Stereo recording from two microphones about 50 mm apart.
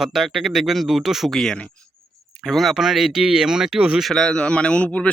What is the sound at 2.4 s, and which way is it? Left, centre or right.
Speech, centre.